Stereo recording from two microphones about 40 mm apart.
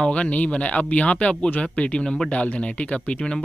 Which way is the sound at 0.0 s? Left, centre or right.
Left.